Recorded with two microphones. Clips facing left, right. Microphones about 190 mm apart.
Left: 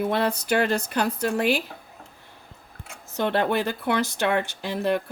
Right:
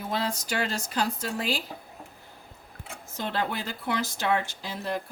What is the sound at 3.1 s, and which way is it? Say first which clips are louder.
Speech: left 8 dB; 65° left (ahead or behind).